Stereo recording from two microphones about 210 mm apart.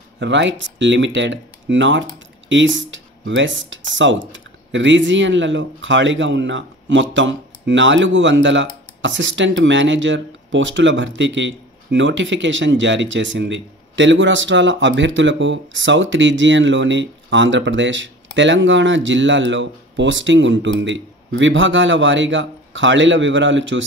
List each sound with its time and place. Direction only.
0.2 s speech: 60° right (ahead or behind)